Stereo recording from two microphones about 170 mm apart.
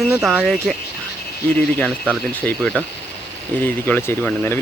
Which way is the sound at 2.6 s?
5° right (ahead or behind).